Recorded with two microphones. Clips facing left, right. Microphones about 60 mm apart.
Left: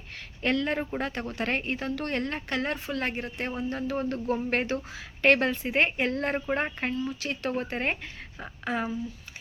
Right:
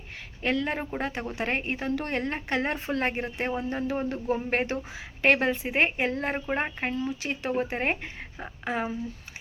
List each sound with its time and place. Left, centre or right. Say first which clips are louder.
0.4 s a woman's voice: left 1 dB; centre
6.9 s a woman's voice: right 1 dB; right